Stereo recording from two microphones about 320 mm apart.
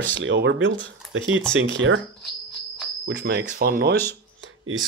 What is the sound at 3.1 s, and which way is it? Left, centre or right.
Speech, right.